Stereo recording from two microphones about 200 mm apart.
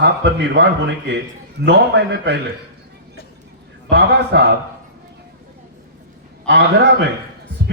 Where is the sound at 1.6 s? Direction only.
55° right (ahead or behind).